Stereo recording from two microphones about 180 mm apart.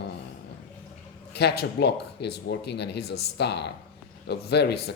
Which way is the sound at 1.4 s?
65° left (ahead or behind).